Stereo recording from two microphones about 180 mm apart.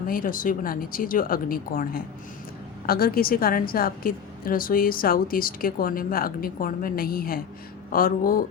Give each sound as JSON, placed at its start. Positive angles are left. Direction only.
{"t": 0.1, "sound": "a woman's voice", "side_deg": 50}